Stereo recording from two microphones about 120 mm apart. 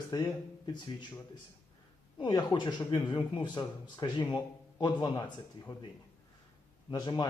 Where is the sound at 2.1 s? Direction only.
40° left (ahead or behind).